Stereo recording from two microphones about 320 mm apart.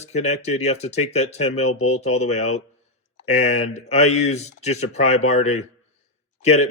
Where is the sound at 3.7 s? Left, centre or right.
Centre.